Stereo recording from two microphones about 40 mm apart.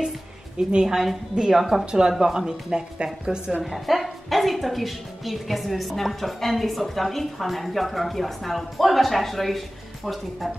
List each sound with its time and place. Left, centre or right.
0.6 s speech: right
3.6 s a woman's voice: centre